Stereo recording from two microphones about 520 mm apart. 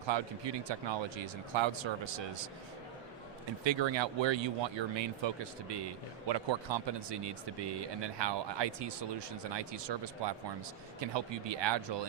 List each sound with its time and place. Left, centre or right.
0.1 s speech: right
3.6 s speech: right